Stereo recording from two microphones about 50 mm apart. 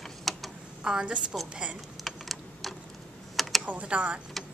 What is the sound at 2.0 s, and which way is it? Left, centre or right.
Typing, centre.